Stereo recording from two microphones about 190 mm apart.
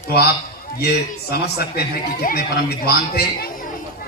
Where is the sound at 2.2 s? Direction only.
55° left (ahead or behind).